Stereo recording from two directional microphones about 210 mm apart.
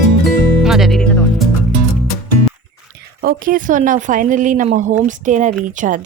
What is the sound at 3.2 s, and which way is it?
Speech, 45° right (ahead or behind).